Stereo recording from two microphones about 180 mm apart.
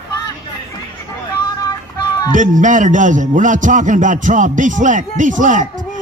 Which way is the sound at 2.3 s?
45° right (ahead or behind).